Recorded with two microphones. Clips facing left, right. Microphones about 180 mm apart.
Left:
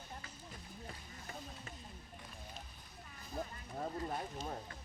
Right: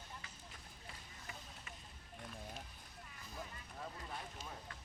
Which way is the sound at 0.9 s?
40° left (ahead or behind).